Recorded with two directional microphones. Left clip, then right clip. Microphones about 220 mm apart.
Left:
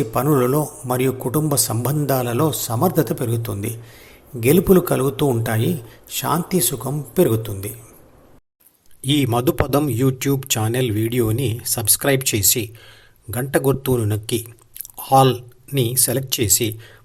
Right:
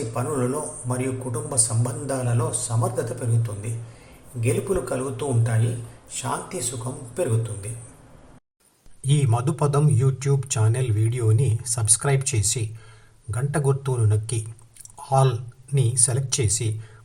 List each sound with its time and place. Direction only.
0.1 s a man's voice: 45° left (ahead or behind)
9.0 s a man's voice: 45° left (ahead or behind)